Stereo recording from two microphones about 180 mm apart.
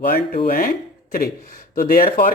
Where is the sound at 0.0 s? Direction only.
55° left (ahead or behind).